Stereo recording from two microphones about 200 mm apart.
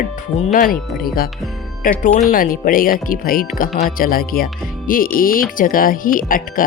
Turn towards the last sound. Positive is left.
turn(degrees=45)  # may be behind; listen again after turning